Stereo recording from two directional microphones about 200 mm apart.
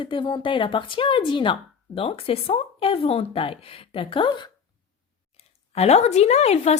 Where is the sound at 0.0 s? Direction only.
25° left (ahead or behind).